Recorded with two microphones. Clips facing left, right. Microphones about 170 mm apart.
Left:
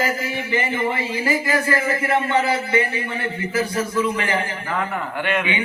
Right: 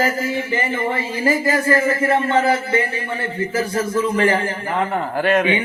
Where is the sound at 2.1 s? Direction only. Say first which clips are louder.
Right 1 dB; 45° right (ahead or behind).